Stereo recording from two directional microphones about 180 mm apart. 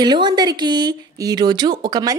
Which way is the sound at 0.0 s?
25° right (ahead or behind).